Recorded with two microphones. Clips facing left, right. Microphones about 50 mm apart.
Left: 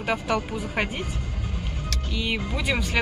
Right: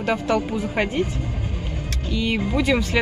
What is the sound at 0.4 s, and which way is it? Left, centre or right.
Speech, right.